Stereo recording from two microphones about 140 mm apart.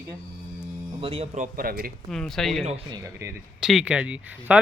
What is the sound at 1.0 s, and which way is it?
Speech, 45° right (ahead or behind).